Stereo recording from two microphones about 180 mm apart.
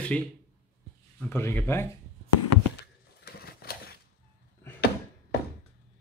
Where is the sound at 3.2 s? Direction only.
60° left (ahead or behind).